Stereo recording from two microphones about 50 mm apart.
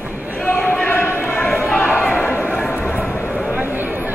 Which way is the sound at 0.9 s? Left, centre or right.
Left.